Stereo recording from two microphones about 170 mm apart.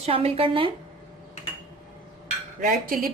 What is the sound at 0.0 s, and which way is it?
Speech, 35° right (ahead or behind).